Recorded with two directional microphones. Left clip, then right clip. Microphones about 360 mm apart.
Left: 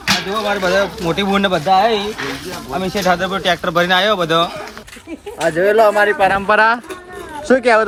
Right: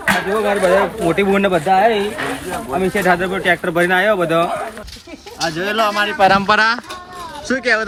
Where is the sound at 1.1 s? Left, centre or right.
Centre.